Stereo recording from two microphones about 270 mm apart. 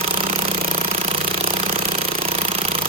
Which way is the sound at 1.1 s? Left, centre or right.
Centre.